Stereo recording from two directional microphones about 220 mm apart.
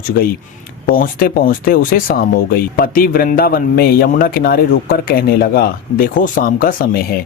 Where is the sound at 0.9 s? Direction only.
40° left (ahead or behind).